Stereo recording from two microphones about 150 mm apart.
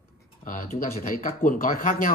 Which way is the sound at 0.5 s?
60° left (ahead or behind).